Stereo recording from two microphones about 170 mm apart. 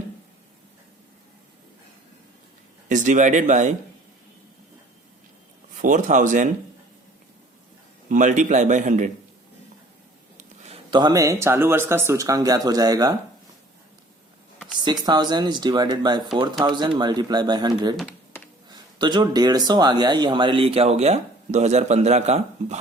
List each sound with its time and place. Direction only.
2.9 s speech: 45° right (ahead or behind)
5.7 s speech: 50° right (ahead or behind)
8.1 s speech: 50° right (ahead or behind)
10.3 s a sound: 40° right (ahead or behind)
10.9 s speech: 25° right (ahead or behind)
14.8 s speech: 25° right (ahead or behind); by 22.8 s 40° right (ahead or behind)